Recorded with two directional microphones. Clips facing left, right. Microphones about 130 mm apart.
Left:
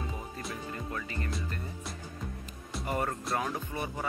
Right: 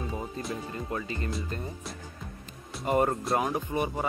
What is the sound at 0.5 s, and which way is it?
Speech, 25° right (ahead or behind).